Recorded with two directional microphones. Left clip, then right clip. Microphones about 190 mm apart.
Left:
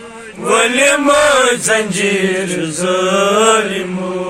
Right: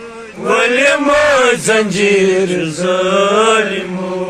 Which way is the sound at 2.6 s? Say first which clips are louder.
Right 1 dB; 5° left (ahead or behind).